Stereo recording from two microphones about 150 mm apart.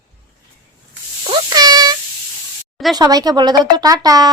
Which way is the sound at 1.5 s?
25° right (ahead or behind).